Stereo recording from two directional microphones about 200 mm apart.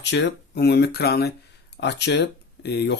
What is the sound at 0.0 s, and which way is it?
Speech, 60° left (ahead or behind).